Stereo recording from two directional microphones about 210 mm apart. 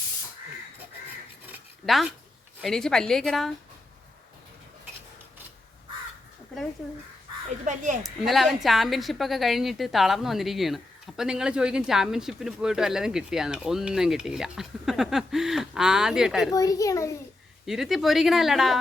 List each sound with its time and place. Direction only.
1.5 s a sound: 5° right (ahead or behind)
2.6 s a woman's voice: centre (ahead or behind)
7.6 s speech: 35° right (ahead or behind)
8.0 s a woman's voice: centre (ahead or behind)
16.5 s a child's voice: 15° left (ahead or behind)
17.7 s a woman's voice: centre (ahead or behind)